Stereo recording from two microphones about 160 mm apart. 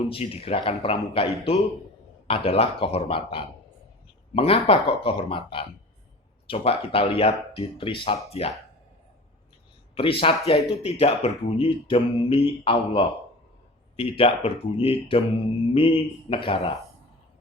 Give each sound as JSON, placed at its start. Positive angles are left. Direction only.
{"t": 0.1, "sound": "speech", "side_deg": 35}
{"t": 9.9, "sound": "speech", "side_deg": 35}